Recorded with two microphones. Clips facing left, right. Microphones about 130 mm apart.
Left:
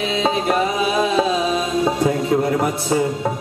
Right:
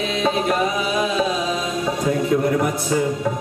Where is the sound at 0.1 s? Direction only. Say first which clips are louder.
Left 1 dB; 25° left (ahead or behind).